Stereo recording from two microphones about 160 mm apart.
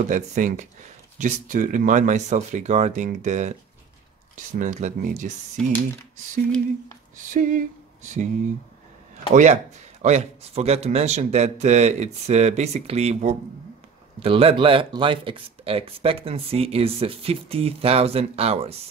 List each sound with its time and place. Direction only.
0.1 s a man's voice: 50° right (ahead or behind)
5.6 s speech: 5° left (ahead or behind)
6.1 s a sound: 50° right (ahead or behind)
9.3 s a man's voice: 50° right (ahead or behind)